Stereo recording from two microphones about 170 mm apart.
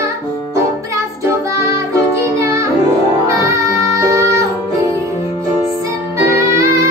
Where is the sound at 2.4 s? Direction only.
15° right (ahead or behind).